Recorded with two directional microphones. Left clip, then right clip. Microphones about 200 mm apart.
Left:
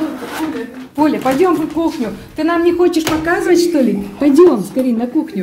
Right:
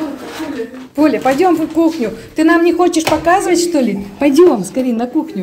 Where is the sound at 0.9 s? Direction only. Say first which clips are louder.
Right 1 dB; 15° right (ahead or behind).